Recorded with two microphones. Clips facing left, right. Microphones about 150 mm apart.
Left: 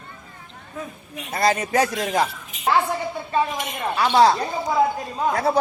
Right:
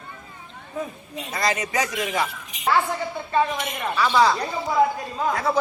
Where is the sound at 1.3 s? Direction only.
30° left (ahead or behind).